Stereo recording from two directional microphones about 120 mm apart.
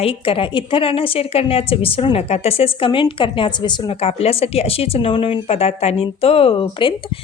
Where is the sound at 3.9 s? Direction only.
60° left (ahead or behind).